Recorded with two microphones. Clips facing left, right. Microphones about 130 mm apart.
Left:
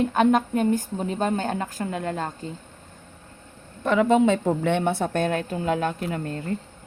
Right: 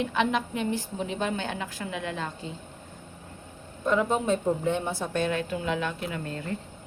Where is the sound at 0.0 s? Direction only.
45° left (ahead or behind).